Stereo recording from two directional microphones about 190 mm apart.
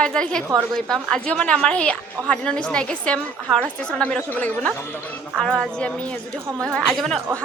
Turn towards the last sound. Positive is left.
turn(degrees=0)  # may be behind; listen again after turning